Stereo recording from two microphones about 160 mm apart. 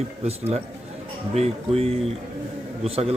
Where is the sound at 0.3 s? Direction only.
40° right (ahead or behind).